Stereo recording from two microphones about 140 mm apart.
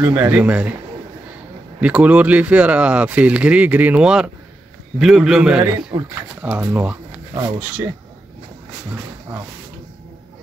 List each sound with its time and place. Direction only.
0.0 s speech: 10° right (ahead or behind)
1.8 s a man's voice: 10° right (ahead or behind)
5.9 s speech: 20° right (ahead or behind)
6.4 s speech: 10° right (ahead or behind)